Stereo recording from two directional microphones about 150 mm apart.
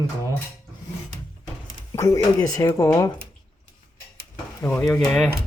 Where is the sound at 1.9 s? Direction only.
25° left (ahead or behind).